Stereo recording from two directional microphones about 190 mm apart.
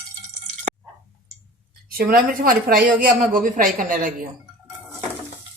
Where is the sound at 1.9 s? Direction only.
50° right (ahead or behind).